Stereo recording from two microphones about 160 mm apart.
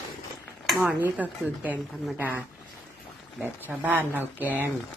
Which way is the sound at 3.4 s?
10° right (ahead or behind).